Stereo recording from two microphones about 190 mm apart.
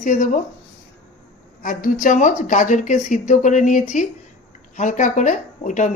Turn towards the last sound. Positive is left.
turn(degrees=40)  # may be behind; listen again after turning